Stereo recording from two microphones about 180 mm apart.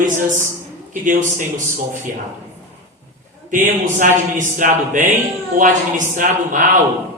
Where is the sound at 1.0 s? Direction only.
45° right (ahead or behind).